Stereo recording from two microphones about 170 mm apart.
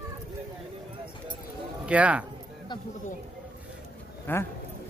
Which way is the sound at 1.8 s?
10° right (ahead or behind).